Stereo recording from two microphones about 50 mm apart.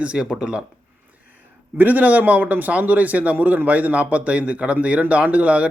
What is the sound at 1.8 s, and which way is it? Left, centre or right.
A man's voice, right.